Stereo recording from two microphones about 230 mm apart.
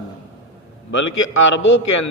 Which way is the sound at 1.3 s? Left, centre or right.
Left.